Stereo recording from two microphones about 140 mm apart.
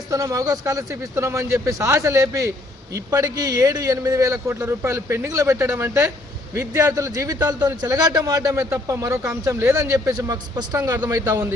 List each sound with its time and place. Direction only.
0.1 s a man's voice: 25° right (ahead or behind)